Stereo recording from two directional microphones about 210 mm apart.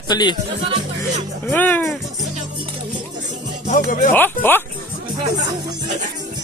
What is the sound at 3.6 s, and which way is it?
Speech, 40° left (ahead or behind).